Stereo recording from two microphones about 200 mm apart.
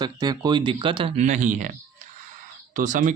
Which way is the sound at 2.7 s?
40° right (ahead or behind).